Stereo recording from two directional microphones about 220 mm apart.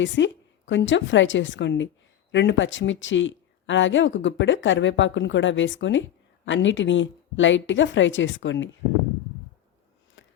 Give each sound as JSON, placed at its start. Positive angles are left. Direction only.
{"t": 0.0, "sound": "speech", "side_deg": 55}